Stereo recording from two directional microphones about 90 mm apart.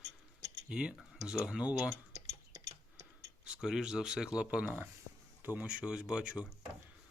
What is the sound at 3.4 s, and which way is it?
Speech, 10° right (ahead or behind).